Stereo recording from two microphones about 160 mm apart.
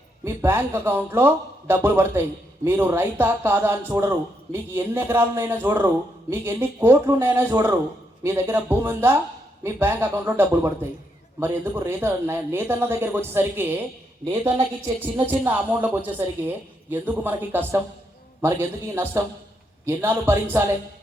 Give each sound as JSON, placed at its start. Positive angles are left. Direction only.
{"t": 0.3, "sound": "speech", "side_deg": -15}
{"t": 15.3, "sound": "speech", "side_deg": -10}